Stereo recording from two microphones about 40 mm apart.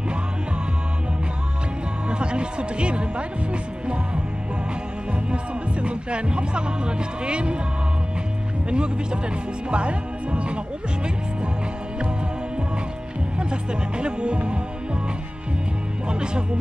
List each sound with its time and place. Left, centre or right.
2.0 s speech: right
3.8 s music: right
5.3 s music: right
8.6 s music: right
13.4 s music: right
16.1 s speech: right